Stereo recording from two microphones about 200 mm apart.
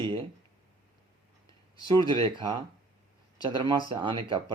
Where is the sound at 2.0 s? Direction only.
25° right (ahead or behind).